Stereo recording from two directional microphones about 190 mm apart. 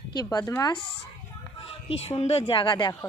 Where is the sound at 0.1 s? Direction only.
20° left (ahead or behind).